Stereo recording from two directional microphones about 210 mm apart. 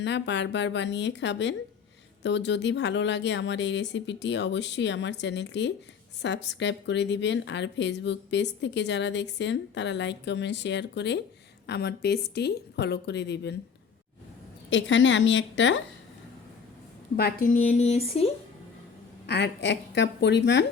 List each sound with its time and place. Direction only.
0.0 s a woman's voice: 55° left (ahead or behind)
14.7 s a woman's voice: 60° left (ahead or behind)
17.2 s speech: 45° left (ahead or behind); by 18.3 s 30° left (ahead or behind)
19.3 s a woman's voice: 55° left (ahead or behind)